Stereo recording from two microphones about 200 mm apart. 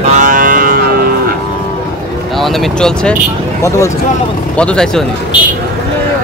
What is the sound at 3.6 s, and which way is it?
Speech, 15° left (ahead or behind).